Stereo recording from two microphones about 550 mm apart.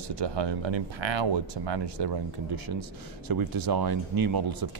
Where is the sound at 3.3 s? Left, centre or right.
Right.